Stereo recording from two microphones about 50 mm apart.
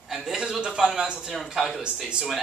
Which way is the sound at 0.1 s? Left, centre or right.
Centre.